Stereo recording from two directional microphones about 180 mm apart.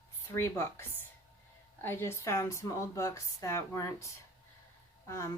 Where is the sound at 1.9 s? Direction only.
10° left (ahead or behind).